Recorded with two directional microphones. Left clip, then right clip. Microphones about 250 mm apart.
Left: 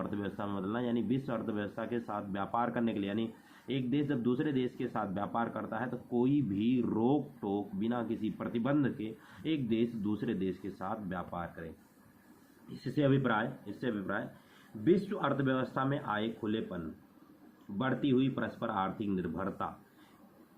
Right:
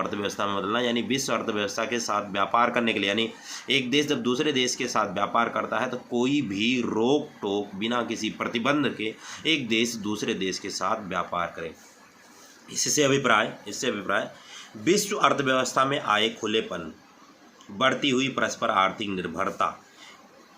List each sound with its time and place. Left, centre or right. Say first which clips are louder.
0.0 s speech: right 11 dB; centre
6.9 s speech: right 8 dB; right
7.8 s speech: right 8 dB; centre
13.0 s speech: right 9 dB; centre
17.7 s speech: right 9 dB; centre